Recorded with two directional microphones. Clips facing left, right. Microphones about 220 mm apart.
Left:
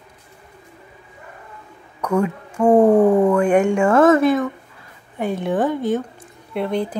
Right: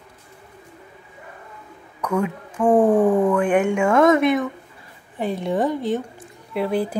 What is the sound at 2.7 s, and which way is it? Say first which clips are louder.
Speech: left 3 dB; 20° left (ahead or behind).